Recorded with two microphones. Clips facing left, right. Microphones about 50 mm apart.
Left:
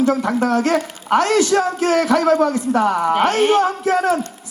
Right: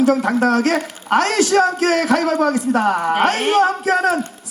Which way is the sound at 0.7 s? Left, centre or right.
Centre.